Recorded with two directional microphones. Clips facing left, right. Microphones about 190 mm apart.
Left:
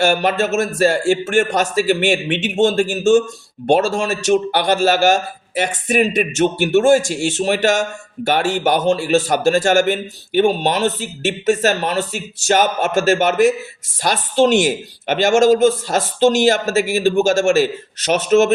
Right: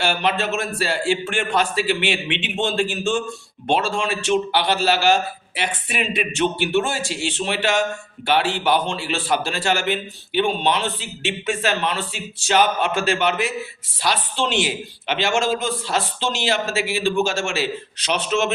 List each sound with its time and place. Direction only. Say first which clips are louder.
0.0 s a man's voice: left 6 dB; 45° left (ahead or behind)